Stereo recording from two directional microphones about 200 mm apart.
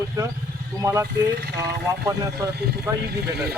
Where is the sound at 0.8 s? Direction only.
15° right (ahead or behind).